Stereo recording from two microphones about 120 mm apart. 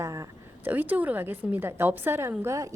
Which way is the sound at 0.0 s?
30° right (ahead or behind).